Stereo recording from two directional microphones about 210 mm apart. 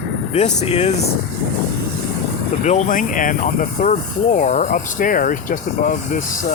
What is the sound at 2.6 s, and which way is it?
Speech, 35° left (ahead or behind).